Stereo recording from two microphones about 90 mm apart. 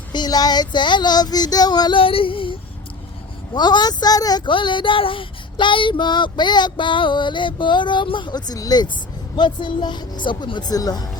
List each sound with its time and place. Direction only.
0.1 s speech: 50° left (ahead or behind)
2.0 s female singing: 80° left
3.5 s speech: 55° left (ahead or behind)
9.3 s speech: 60° left (ahead or behind)